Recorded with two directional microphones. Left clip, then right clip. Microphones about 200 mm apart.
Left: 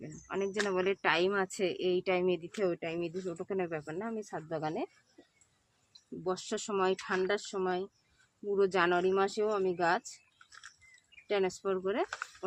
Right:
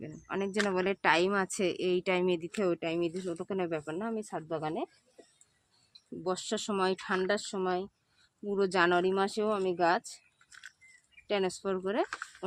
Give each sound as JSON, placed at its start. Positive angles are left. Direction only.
{"t": 0.0, "sound": "a sound", "side_deg": -45}
{"t": 0.7, "sound": "speech", "side_deg": -45}
{"t": 6.2, "sound": "speech", "side_deg": -35}
{"t": 11.3, "sound": "speech", "side_deg": -35}